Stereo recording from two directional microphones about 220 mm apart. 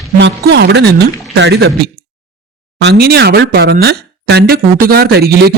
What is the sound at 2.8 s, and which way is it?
Speech, 50° right (ahead or behind).